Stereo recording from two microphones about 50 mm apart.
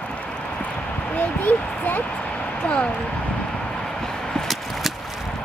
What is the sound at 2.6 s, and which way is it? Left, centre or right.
Speech, left.